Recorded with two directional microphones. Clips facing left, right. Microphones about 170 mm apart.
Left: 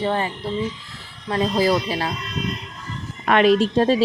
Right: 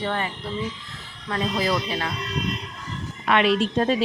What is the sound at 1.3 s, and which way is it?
Speech, 30° left (ahead or behind).